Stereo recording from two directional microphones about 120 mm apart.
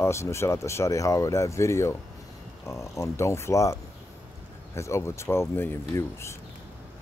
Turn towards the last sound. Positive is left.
turn(degrees=25)  # may be behind; listen again after turning